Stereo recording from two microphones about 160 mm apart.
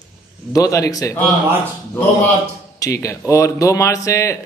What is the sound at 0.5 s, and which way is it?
Speech, 20° left (ahead or behind).